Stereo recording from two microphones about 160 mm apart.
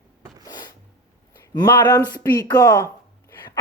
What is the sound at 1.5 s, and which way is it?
A woman's voice, 25° left (ahead or behind).